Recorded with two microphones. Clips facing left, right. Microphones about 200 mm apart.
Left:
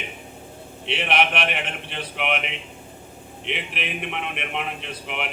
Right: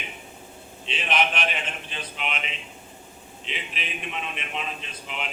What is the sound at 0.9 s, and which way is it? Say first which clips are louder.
A man's voice: left 3 dB; 65° left (ahead or behind).